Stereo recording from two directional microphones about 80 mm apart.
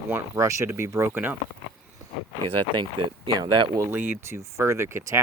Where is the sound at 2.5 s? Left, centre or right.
Right.